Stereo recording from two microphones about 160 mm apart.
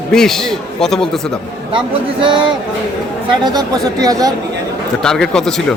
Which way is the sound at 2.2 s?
30° right (ahead or behind).